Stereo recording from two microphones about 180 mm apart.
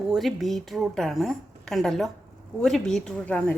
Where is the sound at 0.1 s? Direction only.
Centre (ahead or behind).